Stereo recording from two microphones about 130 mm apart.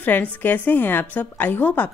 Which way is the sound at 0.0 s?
10° left (ahead or behind).